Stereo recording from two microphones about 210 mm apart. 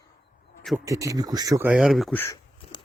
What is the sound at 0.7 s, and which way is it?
Speech, 15° right (ahead or behind).